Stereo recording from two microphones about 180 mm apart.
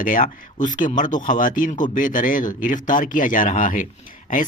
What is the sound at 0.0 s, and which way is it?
Speech, 50° left (ahead or behind).